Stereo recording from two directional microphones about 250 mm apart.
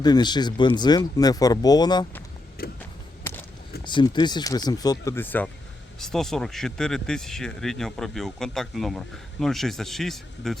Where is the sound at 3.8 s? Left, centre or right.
Centre.